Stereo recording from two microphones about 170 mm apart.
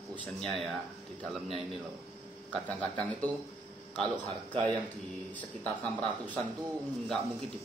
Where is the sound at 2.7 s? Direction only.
10° left (ahead or behind).